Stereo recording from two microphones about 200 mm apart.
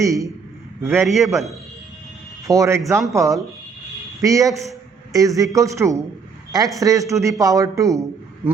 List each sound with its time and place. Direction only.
0.0 s speech: 15° right (ahead or behind)
1.0 s a man's voice: centre (ahead or behind)
2.5 s speech: 15° right (ahead or behind)